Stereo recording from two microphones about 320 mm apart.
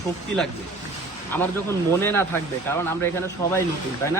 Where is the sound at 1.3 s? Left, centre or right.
Centre.